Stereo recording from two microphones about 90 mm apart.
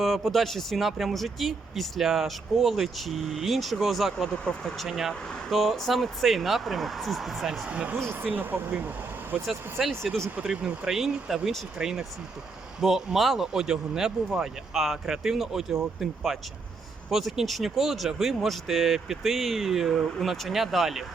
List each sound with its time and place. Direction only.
0.0 s speech: centre (ahead or behind)
7.9 s speech: 25° right (ahead or behind)
9.5 s speech: centre (ahead or behind)
10.3 s speech: 10° right (ahead or behind)